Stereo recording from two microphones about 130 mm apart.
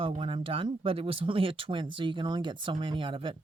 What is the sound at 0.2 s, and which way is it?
Speech, 45° right (ahead or behind).